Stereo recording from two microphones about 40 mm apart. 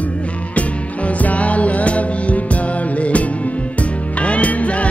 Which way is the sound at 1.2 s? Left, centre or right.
Left.